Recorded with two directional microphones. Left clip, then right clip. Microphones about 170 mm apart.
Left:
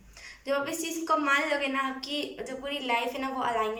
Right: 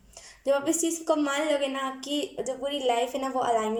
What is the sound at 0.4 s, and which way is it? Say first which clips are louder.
A woman's voice: right 5 dB; 40° right (ahead or behind).